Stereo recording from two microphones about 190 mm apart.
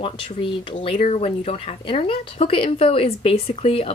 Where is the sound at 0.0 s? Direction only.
30° left (ahead or behind).